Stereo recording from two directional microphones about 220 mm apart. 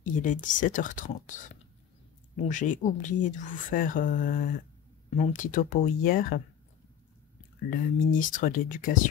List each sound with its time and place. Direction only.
0.0 s speech: 35° left (ahead or behind)
7.7 s speech: 40° left (ahead or behind)